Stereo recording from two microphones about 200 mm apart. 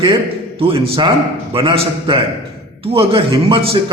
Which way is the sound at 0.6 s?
25° right (ahead or behind).